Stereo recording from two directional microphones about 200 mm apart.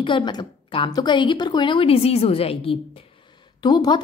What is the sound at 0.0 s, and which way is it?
A woman's voice, 20° left (ahead or behind).